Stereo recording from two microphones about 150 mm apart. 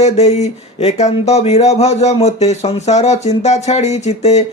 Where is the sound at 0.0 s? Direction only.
45° left (ahead or behind).